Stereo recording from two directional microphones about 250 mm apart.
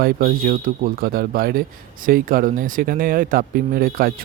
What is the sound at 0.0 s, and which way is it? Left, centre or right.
Speech, right.